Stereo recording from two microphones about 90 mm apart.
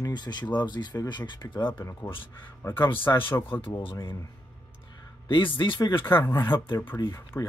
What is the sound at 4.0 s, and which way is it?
Speech, 35° left (ahead or behind).